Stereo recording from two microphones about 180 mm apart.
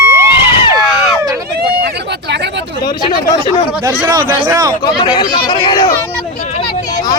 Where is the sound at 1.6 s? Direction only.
70° right (ahead or behind).